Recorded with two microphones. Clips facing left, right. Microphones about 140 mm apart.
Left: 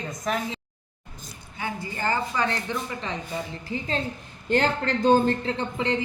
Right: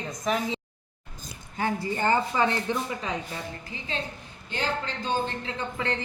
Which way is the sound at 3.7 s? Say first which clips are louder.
Left 8 dB; 40° left (ahead or behind).